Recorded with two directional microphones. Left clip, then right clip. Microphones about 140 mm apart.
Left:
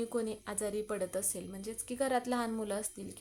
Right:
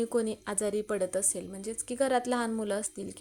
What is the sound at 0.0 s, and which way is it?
A woman's voice, 30° right (ahead or behind).